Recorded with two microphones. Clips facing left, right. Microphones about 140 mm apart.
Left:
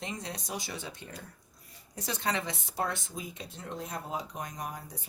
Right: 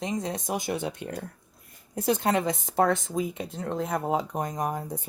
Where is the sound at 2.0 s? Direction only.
50° right (ahead or behind).